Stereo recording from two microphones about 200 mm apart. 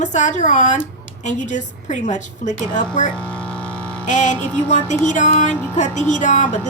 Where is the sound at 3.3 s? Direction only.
5° left (ahead or behind).